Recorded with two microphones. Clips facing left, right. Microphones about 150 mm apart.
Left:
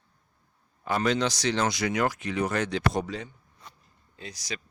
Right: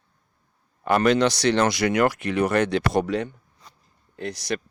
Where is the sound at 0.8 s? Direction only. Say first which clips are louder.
Right 7 dB; 70° right (ahead or behind).